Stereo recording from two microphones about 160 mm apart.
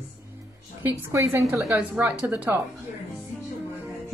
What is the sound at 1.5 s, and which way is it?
A woman's voice, 5° right (ahead or behind).